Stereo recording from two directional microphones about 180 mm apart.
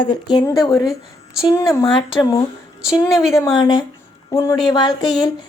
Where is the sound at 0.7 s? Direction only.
Centre (ahead or behind).